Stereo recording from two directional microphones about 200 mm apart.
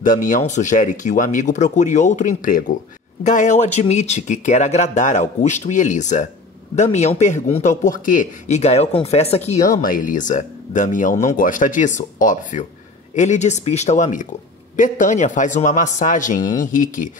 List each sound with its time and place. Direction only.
0.0 s speech: 40° left (ahead or behind)
9.8 s speech: 45° left (ahead or behind)